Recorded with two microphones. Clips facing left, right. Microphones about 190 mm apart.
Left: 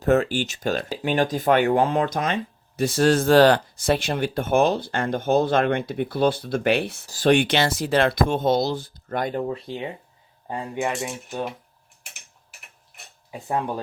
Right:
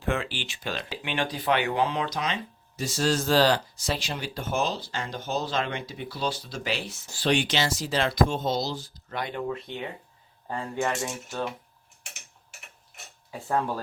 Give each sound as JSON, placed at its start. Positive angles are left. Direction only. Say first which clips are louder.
{"t": 0.0, "sound": "speech", "louder": "left 10 dB", "side_deg": 40}
{"t": 7.1, "sound": "speech", "louder": "left 7 dB", "side_deg": 50}
{"t": 9.5, "sound": "speech", "louder": "left 4 dB", "side_deg": 30}
{"t": 10.5, "sound": "speech", "louder": "left 2 dB", "side_deg": 15}
{"t": 13.3, "sound": "speech", "louder": "left 2 dB", "side_deg": 15}